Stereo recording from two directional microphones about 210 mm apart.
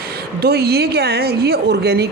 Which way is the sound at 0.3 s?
50° right (ahead or behind).